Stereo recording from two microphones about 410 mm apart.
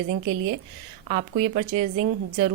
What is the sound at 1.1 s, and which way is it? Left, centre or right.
Speech, right.